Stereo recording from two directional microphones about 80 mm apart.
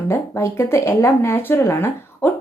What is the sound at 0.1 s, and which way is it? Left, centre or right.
A woman's voice, left.